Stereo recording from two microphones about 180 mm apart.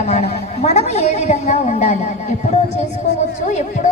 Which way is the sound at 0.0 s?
35° left (ahead or behind).